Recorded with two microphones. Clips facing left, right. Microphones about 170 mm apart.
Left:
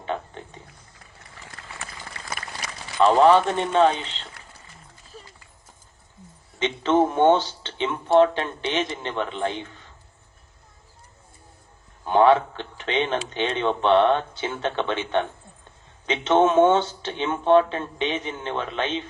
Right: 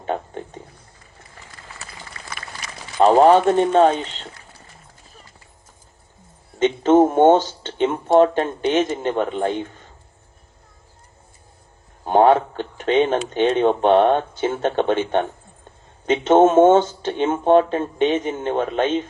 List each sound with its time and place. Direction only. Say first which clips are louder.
0.0 s a sound: right 4 dB; 45° right (ahead or behind)
3.0 s speech: right 4 dB; 45° right (ahead or behind)
6.6 s speech: right 6 dB; 45° right (ahead or behind)
12.0 s speech: right 3 dB; 45° right (ahead or behind)